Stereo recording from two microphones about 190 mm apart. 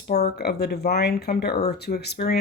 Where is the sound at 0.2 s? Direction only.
60° left (ahead or behind).